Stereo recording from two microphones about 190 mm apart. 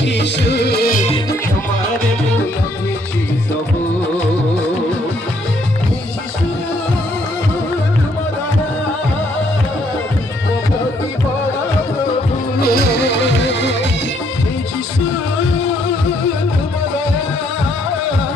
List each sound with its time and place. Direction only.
0.0 s music: 65° left (ahead or behind)
12.6 s music: 60° left (ahead or behind)